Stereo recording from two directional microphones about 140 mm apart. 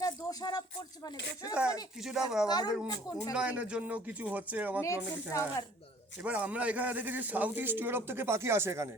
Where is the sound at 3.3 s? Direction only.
10° right (ahead or behind).